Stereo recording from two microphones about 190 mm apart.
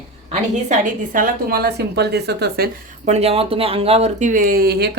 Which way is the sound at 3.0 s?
35° right (ahead or behind).